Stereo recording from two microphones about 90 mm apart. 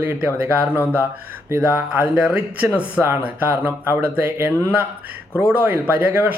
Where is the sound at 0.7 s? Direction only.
25° left (ahead or behind).